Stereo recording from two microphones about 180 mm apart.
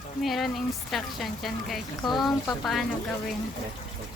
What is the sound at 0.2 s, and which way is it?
Speech, centre (ahead or behind).